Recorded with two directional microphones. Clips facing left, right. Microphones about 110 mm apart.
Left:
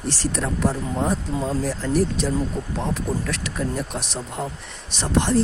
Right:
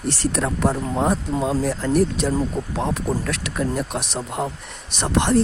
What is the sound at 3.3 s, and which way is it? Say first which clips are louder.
Speech: right 2 dB; 60° right (ahead or behind).